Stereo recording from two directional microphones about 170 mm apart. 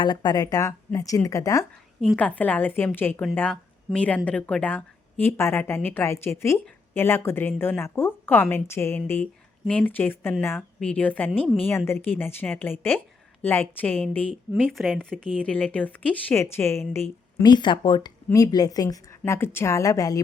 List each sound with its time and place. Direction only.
0.0 s a woman's voice: 25° left (ahead or behind)
2.0 s a woman's voice: 5° left (ahead or behind)
17.4 s a woman's voice: 25° left (ahead or behind)